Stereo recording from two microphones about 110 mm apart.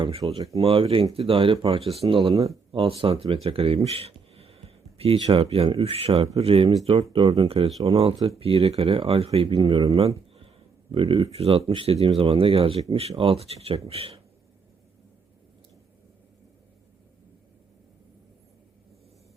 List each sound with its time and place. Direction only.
0.0 s speech: 60° right (ahead or behind)
9.6 s speech: 45° right (ahead or behind)
11.3 s speech: 70° right (ahead or behind)